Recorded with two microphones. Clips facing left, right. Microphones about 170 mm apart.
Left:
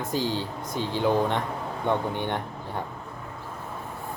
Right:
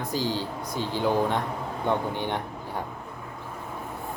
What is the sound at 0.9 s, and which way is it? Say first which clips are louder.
Speech: left 1 dB; 10° right (ahead or behind).